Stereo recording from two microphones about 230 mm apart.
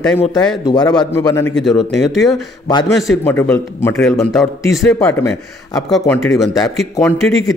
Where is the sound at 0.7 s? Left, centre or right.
Centre.